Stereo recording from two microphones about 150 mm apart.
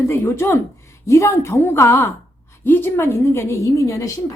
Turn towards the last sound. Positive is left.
turn(degrees=20)  # may be behind; listen again after turning